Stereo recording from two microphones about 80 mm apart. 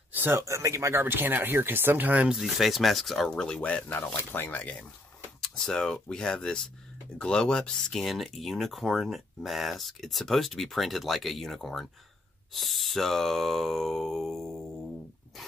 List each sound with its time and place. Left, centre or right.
0.1 s speech: right
2.3 s speech: centre